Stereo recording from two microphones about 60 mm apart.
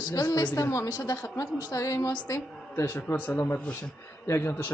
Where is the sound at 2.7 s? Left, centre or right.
Left.